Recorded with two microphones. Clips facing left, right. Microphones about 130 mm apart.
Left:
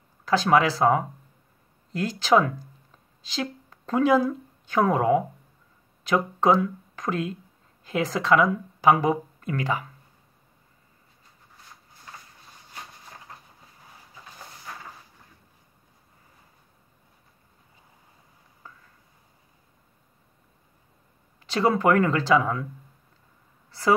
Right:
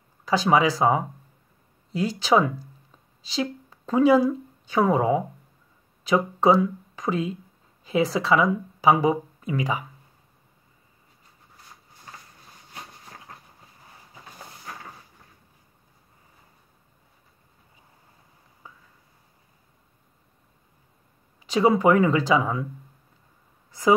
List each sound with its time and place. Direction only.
0.2 s speech: 5° right (ahead or behind)
21.5 s speech: 10° right (ahead or behind)